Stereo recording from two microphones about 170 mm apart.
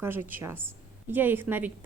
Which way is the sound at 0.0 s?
10° right (ahead or behind).